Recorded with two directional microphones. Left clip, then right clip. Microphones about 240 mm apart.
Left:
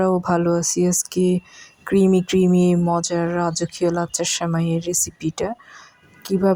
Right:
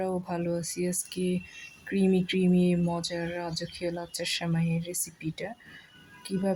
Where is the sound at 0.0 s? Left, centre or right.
Left.